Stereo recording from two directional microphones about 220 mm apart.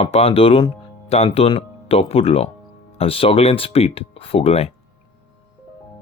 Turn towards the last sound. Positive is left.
turn(degrees=25)  # may be behind; listen again after turning